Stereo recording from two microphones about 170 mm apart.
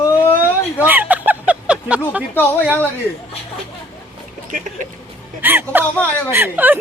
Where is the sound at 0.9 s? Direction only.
10° right (ahead or behind).